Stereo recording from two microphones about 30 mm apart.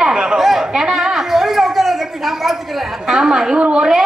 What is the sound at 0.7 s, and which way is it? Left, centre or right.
A woman's voice, centre.